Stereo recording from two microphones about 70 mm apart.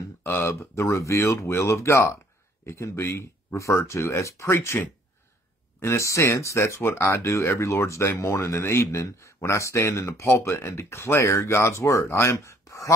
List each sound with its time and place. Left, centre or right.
0.4 s speech: left
5.8 s speech: left